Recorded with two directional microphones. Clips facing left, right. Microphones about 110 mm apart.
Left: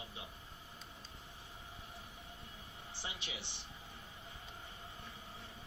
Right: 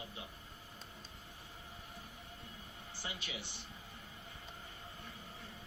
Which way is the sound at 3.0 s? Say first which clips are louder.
Right 2 dB; 25° left (ahead or behind).